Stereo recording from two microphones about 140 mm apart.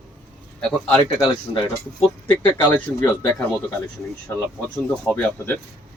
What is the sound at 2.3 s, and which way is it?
Speech, 15° left (ahead or behind).